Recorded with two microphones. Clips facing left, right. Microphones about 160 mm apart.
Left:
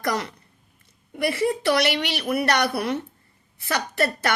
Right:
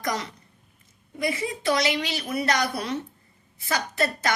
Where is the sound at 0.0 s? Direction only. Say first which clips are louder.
Left 3 dB; 60° left (ahead or behind).